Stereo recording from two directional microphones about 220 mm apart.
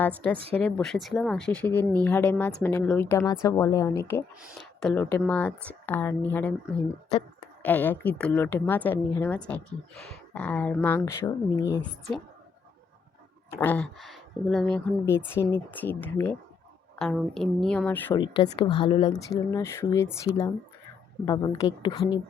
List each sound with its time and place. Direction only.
0.0 s a woman's voice: 5° left (ahead or behind)
4.4 s a woman's voice: centre (ahead or behind)
13.6 s a woman's voice: 5° left (ahead or behind)
18.2 s a woman's voice: 25° left (ahead or behind)